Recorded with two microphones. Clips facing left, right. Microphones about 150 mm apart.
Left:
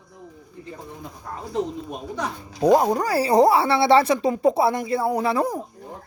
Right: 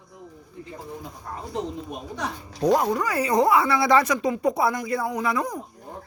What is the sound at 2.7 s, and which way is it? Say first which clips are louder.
Speech: left 5 dB; 35° left (ahead or behind).